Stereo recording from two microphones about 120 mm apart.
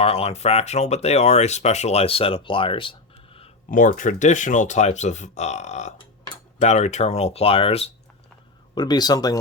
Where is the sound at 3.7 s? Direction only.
90° left; by 7.9 s 55° left (ahead or behind).